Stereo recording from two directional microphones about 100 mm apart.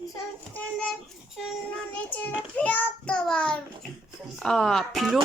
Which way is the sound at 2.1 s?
15° left (ahead or behind).